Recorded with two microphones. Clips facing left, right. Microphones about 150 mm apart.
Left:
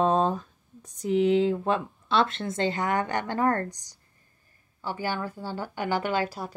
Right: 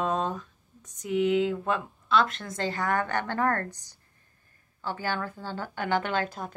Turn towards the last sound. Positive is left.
turn(degrees=10)  # may be behind; listen again after turning